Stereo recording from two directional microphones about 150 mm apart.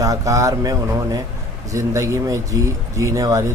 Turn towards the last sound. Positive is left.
turn(degrees=-20)  # may be behind; listen again after turning